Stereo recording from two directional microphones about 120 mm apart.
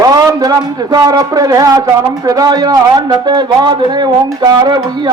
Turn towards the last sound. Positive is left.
turn(degrees=-40)  # may be behind; listen again after turning